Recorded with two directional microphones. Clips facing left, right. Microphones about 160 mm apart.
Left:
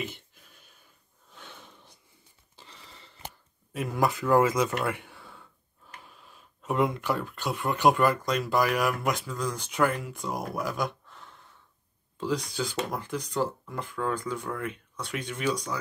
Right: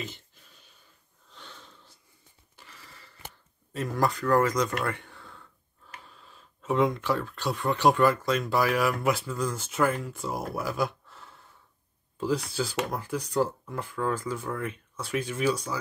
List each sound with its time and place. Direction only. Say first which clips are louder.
1.3 s snort: left 1 dB; 15° left (ahead or behind)
2.5 s a sound: left 1 dB; 25° left (ahead or behind)
3.7 s speech: even; 5° left (ahead or behind)
4.8 s a sound: left 1 dB; 5° left (ahead or behind)
6.0 s speech: even; 5° left (ahead or behind)
12.5 s speech: right 1 dB; 5° right (ahead or behind)